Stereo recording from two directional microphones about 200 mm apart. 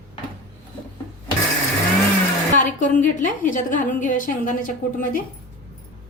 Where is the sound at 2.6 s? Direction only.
40° left (ahead or behind).